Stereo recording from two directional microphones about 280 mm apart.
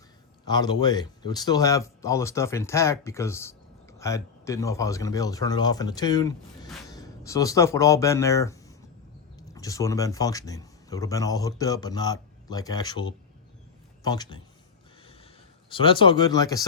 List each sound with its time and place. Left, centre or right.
0.4 s speech: centre
15.7 s speech: centre